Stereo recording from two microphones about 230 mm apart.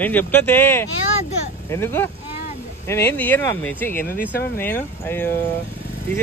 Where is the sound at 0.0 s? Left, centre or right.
Centre.